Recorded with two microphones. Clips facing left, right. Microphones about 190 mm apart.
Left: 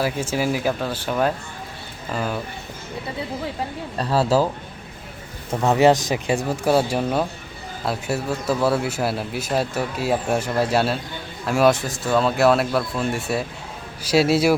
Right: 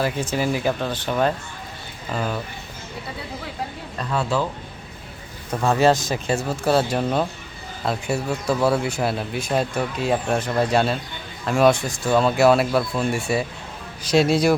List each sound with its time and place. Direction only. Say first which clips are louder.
0.0 s speech: even; 10° left (ahead or behind)
3.9 s speech: left 5 dB; 35° left (ahead or behind)
5.5 s speech: left 2 dB; 20° left (ahead or behind)